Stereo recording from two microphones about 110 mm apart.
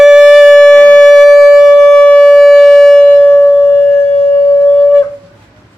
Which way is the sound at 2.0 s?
10° left (ahead or behind).